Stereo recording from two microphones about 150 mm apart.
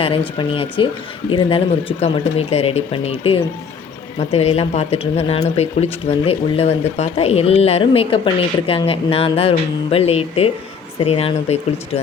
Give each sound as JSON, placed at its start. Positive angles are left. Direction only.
{"t": 0.3, "sound": "speech", "side_deg": 35}